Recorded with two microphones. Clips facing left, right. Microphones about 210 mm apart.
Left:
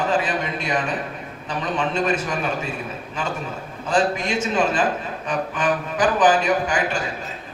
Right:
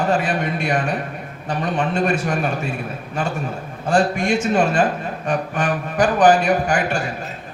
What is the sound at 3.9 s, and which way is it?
A man's voice, 50° right (ahead or behind).